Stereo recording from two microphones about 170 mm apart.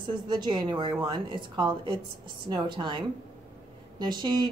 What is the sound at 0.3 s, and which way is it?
A woman's voice, 25° right (ahead or behind).